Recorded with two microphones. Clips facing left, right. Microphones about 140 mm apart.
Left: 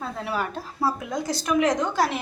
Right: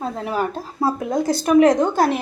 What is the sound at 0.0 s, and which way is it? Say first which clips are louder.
Speech: right 5 dB; 40° right (ahead or behind).